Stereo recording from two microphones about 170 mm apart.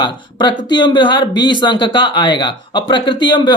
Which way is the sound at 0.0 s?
25° left (ahead or behind).